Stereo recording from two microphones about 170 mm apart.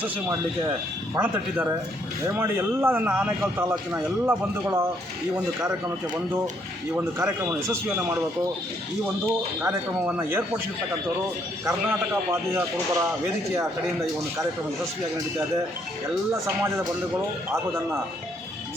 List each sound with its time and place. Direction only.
1.1 s a man's voice: 10° right (ahead or behind)
6.9 s a man's voice: 15° right (ahead or behind)
9.6 s a man's voice: 10° right (ahead or behind)
11.6 s a man's voice: 15° right (ahead or behind)